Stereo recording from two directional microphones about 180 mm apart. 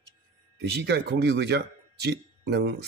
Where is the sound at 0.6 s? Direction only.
65° right (ahead or behind).